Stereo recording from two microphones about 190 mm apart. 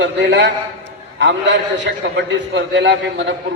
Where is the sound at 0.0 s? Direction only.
70° right (ahead or behind).